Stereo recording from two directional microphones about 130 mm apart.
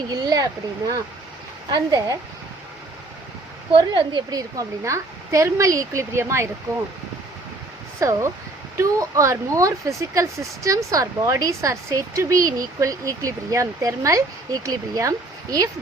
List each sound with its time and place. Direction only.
0.1 s a sound: 30° right (ahead or behind)
1.7 s speech: 30° right (ahead or behind)
3.7 s speech: 40° right (ahead or behind); by 6.5 s 20° right (ahead or behind)
7.9 s speech: 20° right (ahead or behind)